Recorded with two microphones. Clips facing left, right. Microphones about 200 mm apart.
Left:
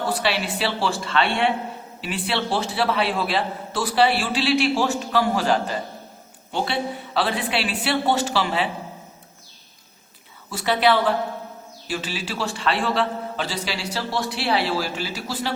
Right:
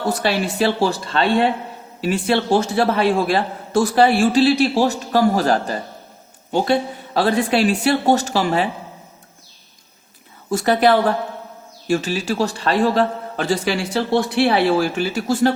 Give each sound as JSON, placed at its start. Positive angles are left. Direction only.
{"t": 0.1, "sound": "a man's voice", "side_deg": -45}
{"t": 10.5, "sound": "a man's voice", "side_deg": -45}